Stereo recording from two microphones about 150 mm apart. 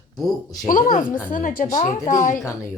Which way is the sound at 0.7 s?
60° left (ahead or behind).